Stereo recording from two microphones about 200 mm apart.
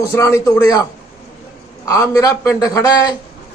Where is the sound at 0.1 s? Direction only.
15° left (ahead or behind).